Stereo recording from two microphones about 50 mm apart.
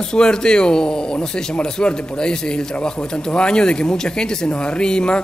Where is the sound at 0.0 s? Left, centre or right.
Centre.